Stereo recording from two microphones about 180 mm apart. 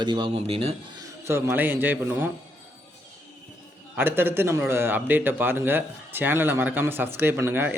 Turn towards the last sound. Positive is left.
turn(degrees=-10)  # may be behind; listen again after turning